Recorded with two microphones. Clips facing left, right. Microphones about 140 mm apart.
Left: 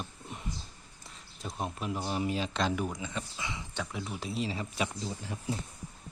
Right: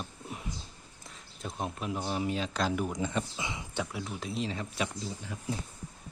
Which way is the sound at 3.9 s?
Centre (ahead or behind).